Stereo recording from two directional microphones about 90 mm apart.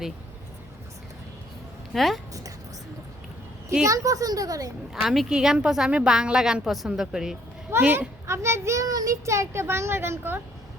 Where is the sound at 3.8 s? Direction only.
40° right (ahead or behind).